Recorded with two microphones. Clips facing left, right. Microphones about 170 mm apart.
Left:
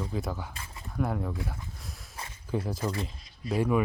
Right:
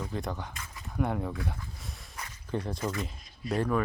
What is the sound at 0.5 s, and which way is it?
Speech, 30° left (ahead or behind).